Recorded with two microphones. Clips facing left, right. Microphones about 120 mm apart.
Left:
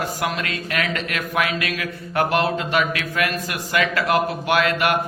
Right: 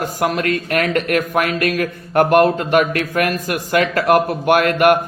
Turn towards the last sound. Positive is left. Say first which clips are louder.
# right 7 dB
turn(degrees=-50)  # may be behind; listen again after turning